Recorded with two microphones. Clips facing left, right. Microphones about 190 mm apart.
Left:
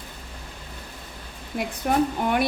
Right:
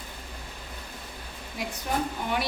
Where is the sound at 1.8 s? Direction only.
55° left (ahead or behind).